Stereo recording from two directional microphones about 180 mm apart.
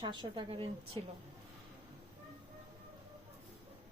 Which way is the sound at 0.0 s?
25° right (ahead or behind).